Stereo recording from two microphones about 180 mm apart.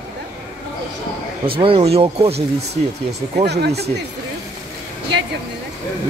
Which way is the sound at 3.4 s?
65° right (ahead or behind).